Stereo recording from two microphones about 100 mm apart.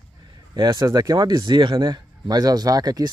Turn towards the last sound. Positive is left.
turn(degrees=-40)  # may be behind; listen again after turning